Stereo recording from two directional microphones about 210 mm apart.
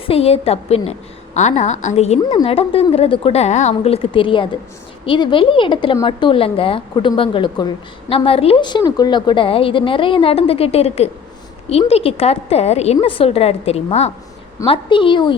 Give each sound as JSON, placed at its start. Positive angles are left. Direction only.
{"t": 0.0, "sound": "a woman's voice", "side_deg": 30}